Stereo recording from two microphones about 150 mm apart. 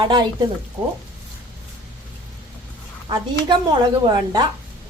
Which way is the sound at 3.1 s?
30° right (ahead or behind).